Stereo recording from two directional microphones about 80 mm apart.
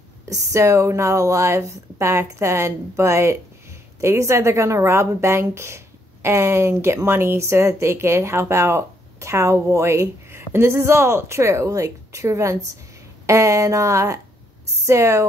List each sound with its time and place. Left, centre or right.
0.2 s speech: right